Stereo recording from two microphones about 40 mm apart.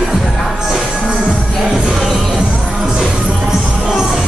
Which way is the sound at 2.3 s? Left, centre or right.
Centre.